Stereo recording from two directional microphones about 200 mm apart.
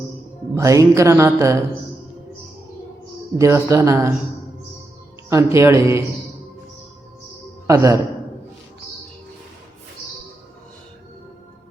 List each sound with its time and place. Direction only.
0.5 s speech: 15° right (ahead or behind)
3.3 s speech: 15° right (ahead or behind)
5.3 s speech: 15° right (ahead or behind)
7.7 s speech: 15° right (ahead or behind)